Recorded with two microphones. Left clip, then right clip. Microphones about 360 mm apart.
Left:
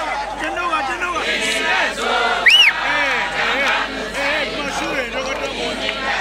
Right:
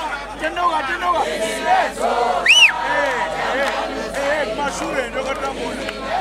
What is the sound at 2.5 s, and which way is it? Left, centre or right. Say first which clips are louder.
Sheep: left 2 dB; right.